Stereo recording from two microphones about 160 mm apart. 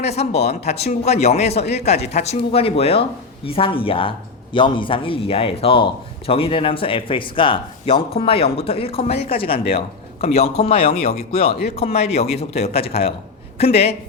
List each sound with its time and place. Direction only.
0.0 s a man's voice: 40° left (ahead or behind)